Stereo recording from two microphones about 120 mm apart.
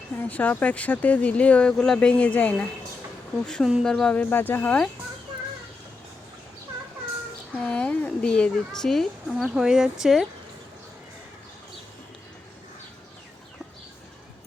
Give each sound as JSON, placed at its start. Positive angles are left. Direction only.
{"t": 0.2, "sound": "speech", "side_deg": 15}
{"t": 7.5, "sound": "a woman's voice", "side_deg": 10}